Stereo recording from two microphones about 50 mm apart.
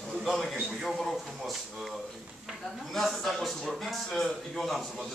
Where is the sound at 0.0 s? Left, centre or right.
Centre.